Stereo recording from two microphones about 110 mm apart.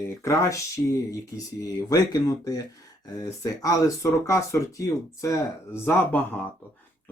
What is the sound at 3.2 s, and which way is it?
Speech, 30° left (ahead or behind).